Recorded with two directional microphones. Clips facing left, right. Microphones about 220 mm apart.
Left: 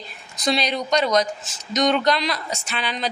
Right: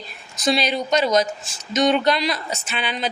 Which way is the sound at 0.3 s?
5° right (ahead or behind).